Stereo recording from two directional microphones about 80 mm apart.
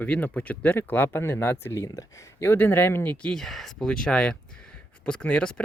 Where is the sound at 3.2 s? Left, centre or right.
Centre.